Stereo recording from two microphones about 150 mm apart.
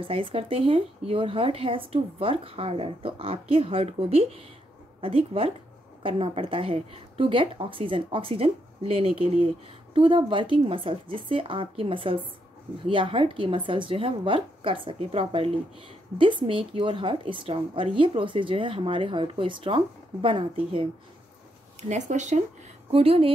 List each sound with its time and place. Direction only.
0.0 s a woman's voice: 35° right (ahead or behind)
21.8 s speech: 50° right (ahead or behind)
22.8 s a woman's voice: 40° right (ahead or behind)